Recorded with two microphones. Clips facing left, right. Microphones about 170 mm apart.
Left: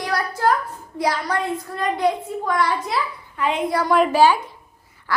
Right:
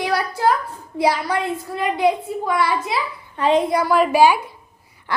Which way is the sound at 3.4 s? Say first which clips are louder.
Right 6 dB; 35° right (ahead or behind).